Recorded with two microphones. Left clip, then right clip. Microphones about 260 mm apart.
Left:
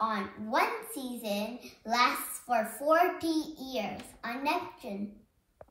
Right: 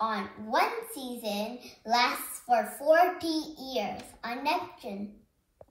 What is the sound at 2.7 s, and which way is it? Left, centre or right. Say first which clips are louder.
A woman's voice: right 2 dB; centre.